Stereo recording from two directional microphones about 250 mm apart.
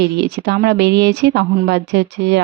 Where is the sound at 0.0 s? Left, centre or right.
Right.